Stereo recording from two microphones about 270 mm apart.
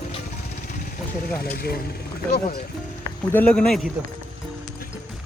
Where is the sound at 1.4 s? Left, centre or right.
Left.